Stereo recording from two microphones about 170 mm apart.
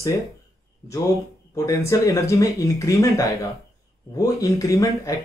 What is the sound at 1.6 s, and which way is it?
Speech, 15° left (ahead or behind).